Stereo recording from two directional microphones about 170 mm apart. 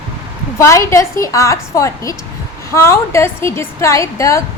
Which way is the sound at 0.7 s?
15° left (ahead or behind).